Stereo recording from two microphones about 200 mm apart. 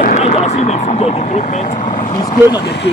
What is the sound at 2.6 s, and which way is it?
Speech, 55° left (ahead or behind).